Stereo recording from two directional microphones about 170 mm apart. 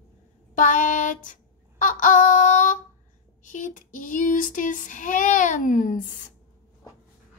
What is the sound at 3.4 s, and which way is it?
A woman's voice, 50° left (ahead or behind).